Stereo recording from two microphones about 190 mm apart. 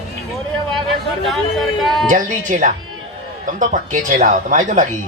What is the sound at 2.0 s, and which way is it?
Speech, 40° right (ahead or behind).